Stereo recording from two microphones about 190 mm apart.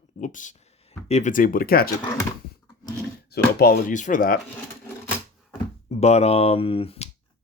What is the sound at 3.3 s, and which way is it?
Speech, 55° left (ahead or behind).